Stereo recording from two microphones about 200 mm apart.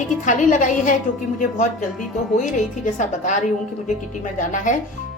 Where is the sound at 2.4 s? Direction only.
40° left (ahead or behind).